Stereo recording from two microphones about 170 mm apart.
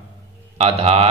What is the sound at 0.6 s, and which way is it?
Speech, 35° right (ahead or behind).